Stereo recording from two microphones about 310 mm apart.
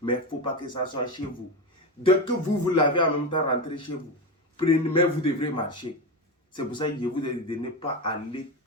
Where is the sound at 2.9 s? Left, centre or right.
Centre.